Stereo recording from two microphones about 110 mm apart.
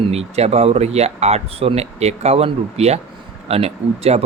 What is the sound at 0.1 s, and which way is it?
Speech, 70° right (ahead or behind).